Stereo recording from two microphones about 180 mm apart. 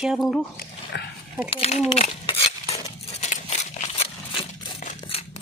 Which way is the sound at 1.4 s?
30° left (ahead or behind).